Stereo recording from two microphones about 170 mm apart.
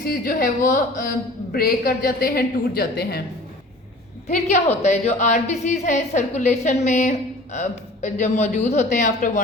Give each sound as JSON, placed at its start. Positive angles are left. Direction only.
{"t": 0.0, "sound": "a woman's voice", "side_deg": 60}
{"t": 4.3, "sound": "speech", "side_deg": 45}